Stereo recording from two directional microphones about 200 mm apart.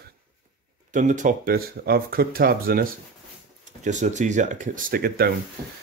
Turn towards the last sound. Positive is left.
turn(degrees=-45)  # may be behind; listen again after turning